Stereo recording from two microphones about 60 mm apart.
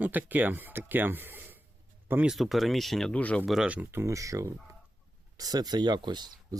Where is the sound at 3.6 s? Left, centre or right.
Right.